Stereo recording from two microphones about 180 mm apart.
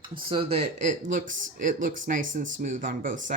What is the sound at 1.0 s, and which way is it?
Speech, 45° right (ahead or behind).